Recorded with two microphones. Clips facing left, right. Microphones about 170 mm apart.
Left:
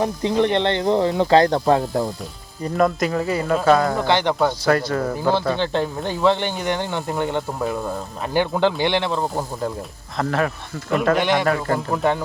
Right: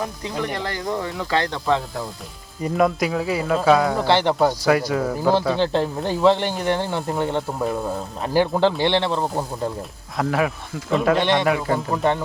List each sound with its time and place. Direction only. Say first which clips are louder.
0.0 s speech: left 8 dB; 25° left (ahead or behind); by 2.0 s 45° left (ahead or behind)
2.6 s speech: even; 5° right (ahead or behind)